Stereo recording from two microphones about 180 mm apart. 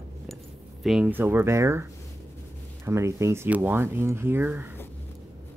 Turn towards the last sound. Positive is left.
turn(degrees=-10)  # may be behind; listen again after turning